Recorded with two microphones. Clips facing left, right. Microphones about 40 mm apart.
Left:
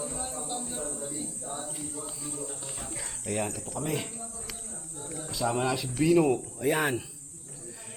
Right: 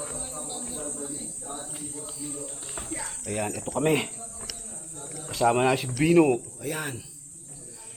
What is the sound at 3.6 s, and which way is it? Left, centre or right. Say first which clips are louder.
Speech: right 8 dB; right.